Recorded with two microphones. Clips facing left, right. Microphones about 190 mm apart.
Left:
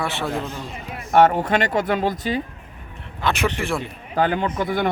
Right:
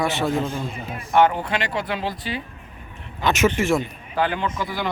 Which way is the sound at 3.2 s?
15° right (ahead or behind).